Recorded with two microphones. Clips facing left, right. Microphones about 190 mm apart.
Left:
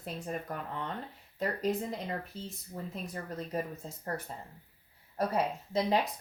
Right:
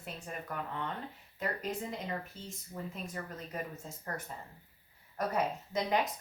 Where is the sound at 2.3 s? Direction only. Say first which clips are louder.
Left 2 dB; 35° left (ahead or behind).